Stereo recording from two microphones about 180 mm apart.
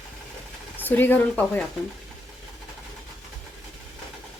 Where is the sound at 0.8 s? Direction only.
10° left (ahead or behind).